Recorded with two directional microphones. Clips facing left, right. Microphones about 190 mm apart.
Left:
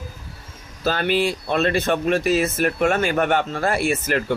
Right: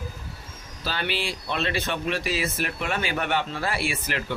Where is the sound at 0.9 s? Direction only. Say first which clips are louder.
Left 9 dB; 45° left (ahead or behind).